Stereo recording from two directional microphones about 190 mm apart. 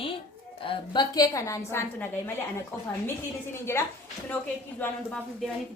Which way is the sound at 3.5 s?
15° left (ahead or behind).